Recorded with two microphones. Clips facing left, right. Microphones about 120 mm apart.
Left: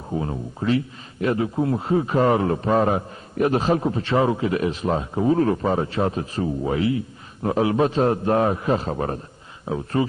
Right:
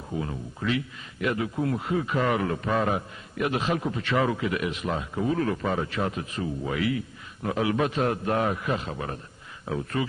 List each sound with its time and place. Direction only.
0.1 s speech: 35° left (ahead or behind)
9.6 s speech: 30° left (ahead or behind)